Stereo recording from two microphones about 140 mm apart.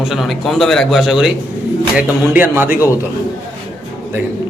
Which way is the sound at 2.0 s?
15° right (ahead or behind).